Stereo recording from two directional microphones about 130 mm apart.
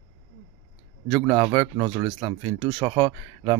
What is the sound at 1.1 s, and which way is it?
A man's voice, 25° right (ahead or behind).